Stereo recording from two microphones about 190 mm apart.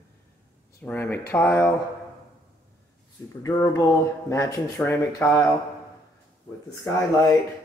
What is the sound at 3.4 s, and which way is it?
Speech, 20° left (ahead or behind).